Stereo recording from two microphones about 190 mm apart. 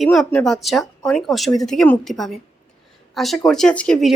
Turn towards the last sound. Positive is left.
turn(degrees=5)  # may be behind; listen again after turning